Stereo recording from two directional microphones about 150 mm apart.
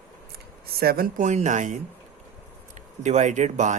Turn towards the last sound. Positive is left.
turn(degrees=-55)  # may be behind; listen again after turning